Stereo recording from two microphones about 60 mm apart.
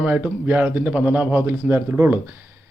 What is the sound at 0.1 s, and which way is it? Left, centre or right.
Speech, right.